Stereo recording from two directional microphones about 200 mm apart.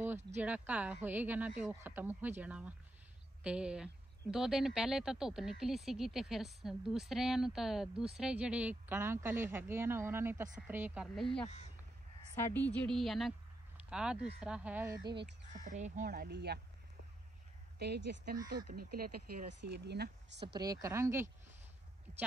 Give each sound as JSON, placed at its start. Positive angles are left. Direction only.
{"t": 0.4, "sound": "speech", "side_deg": -5}
{"t": 12.4, "sound": "speech", "side_deg": 10}
{"t": 15.5, "sound": "speech", "side_deg": -40}
{"t": 17.7, "sound": "speech", "side_deg": -55}
{"t": 20.4, "sound": "speech", "side_deg": -20}